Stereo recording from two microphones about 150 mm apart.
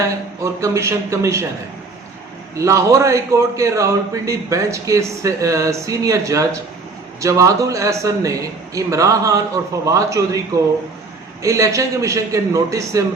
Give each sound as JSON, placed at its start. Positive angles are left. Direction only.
{"t": 0.0, "sound": "a man's voice", "side_deg": -20}
{"t": 2.6, "sound": "a man's voice", "side_deg": -20}